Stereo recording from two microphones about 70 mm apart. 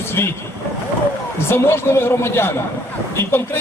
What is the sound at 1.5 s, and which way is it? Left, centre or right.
A man's voice, left.